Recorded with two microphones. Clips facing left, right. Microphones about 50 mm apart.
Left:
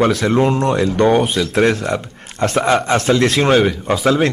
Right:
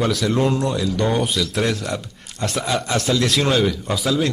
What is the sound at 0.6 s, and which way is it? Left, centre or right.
Speech, left.